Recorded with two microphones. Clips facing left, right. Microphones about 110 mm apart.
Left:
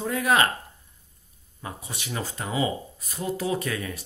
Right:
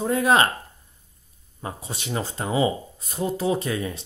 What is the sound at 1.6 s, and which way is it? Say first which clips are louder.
Speech: right 4 dB; 30° right (ahead or behind).